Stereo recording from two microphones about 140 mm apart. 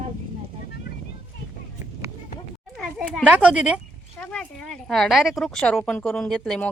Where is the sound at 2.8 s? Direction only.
5° left (ahead or behind).